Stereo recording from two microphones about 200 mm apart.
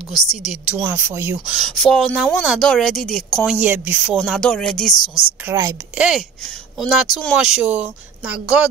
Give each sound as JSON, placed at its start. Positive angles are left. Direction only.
{"t": 0.1, "sound": "speech", "side_deg": 0}
{"t": 0.8, "sound": "speech", "side_deg": -15}
{"t": 4.9, "sound": "speech", "side_deg": 20}
{"t": 5.4, "sound": "a woman's voice", "side_deg": -15}
{"t": 6.0, "sound": "speech", "side_deg": 0}